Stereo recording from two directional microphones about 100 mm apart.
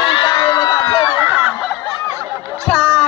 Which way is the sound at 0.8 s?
45° left (ahead or behind).